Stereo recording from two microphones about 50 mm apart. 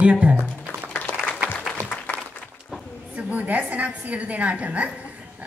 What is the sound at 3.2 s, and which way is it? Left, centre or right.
A woman's voice, right.